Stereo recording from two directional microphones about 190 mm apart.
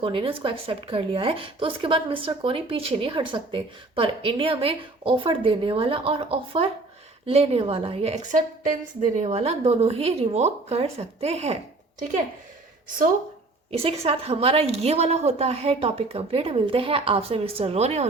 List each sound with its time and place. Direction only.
0.0 s a woman's voice: 25° right (ahead or behind)
13.7 s a woman's voice: 30° right (ahead or behind)